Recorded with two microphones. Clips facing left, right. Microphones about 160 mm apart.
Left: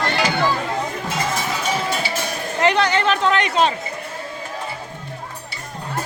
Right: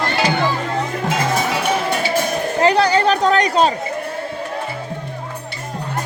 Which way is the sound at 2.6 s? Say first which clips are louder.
Right 3 dB; 35° right (ahead or behind).